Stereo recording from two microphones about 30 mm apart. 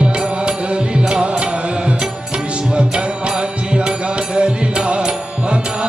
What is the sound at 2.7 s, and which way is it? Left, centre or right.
Music, right.